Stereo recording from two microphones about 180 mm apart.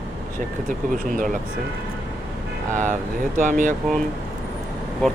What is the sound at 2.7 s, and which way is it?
Speech, 45° right (ahead or behind).